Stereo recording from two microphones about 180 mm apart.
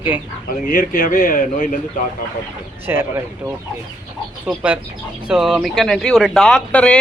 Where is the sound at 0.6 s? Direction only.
50° left (ahead or behind).